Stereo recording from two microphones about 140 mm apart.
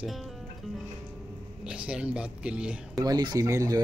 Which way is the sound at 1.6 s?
5° right (ahead or behind).